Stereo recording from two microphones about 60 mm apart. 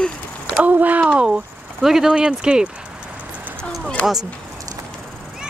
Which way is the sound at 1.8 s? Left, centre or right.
Centre.